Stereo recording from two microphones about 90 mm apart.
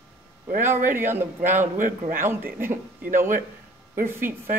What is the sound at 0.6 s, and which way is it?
Speech, 25° right (ahead or behind).